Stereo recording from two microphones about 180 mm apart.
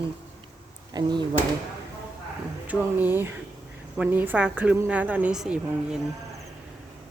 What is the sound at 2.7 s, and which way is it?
A woman's voice, 10° right (ahead or behind).